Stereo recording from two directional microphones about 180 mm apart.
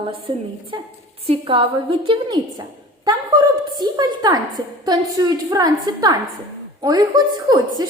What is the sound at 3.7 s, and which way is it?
A woman's voice, 25° right (ahead or behind).